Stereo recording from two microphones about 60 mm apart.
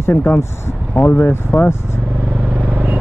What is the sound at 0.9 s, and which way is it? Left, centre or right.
Speech, left.